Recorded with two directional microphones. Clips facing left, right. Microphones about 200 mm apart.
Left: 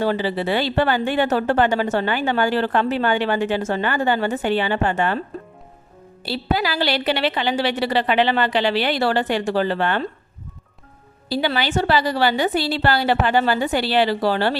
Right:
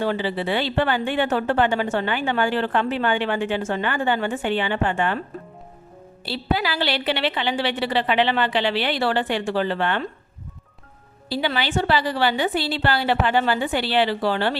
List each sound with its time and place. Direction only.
0.0 s speech: 40° left (ahead or behind)
6.2 s speech: 40° left (ahead or behind)
11.3 s speech: 40° left (ahead or behind)